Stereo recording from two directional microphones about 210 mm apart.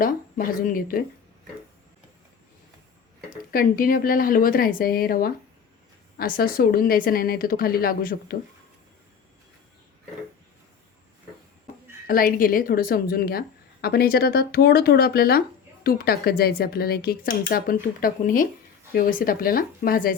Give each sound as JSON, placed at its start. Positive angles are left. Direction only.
{"t": 0.0, "sound": "speech", "side_deg": 40}
{"t": 3.2, "sound": "speech", "side_deg": 40}
{"t": 12.0, "sound": "speech", "side_deg": 45}